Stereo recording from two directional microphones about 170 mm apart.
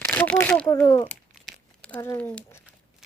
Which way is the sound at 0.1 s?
10° left (ahead or behind).